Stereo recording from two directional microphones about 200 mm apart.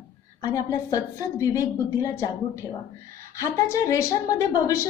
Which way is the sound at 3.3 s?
15° left (ahead or behind).